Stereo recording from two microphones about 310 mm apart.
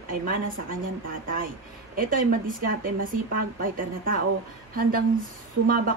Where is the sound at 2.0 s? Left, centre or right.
Right.